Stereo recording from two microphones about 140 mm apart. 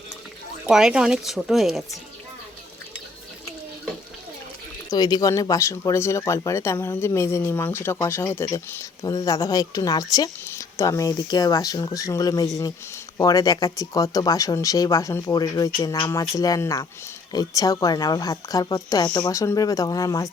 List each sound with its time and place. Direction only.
0.7 s speech: 5° right (ahead or behind)
4.9 s speech: 25° left (ahead or behind)